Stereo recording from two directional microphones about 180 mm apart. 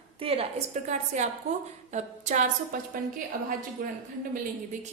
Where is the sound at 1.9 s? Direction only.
40° right (ahead or behind).